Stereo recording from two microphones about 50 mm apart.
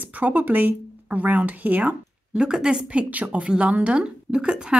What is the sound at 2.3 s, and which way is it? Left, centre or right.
A woman's voice, centre.